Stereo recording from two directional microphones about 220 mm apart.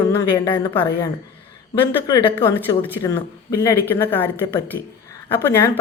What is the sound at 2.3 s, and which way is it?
Speech, 15° left (ahead or behind).